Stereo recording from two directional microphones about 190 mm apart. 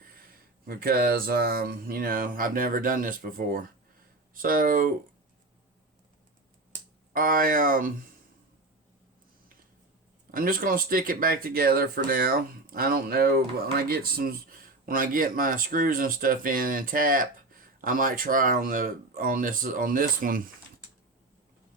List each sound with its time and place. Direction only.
0.6 s speech: 50° right (ahead or behind)
7.1 s speech: 45° right (ahead or behind)
10.3 s speech: 50° right (ahead or behind)